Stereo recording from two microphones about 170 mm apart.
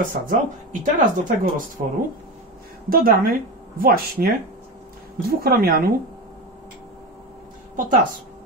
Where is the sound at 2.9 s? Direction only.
60° right (ahead or behind).